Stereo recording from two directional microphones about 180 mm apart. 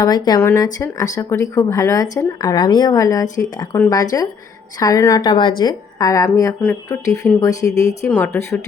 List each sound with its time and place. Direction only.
0.0 s a woman's voice: 20° left (ahead or behind)